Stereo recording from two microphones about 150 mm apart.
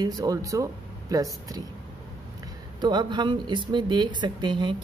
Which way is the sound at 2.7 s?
30° right (ahead or behind).